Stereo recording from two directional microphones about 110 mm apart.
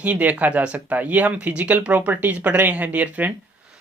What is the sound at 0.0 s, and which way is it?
Speech, 15° right (ahead or behind).